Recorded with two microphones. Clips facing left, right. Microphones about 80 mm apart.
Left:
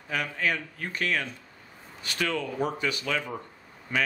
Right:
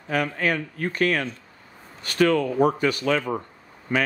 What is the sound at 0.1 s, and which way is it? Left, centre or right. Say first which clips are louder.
Speech: right 5 dB; right.